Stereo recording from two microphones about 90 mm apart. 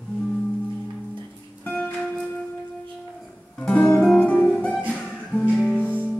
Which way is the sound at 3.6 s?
15° left (ahead or behind).